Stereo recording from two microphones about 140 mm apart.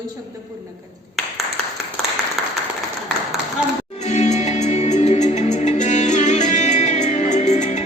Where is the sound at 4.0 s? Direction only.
55° left (ahead or behind).